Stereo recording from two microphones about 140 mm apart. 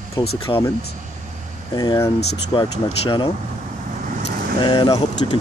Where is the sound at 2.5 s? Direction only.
35° left (ahead or behind).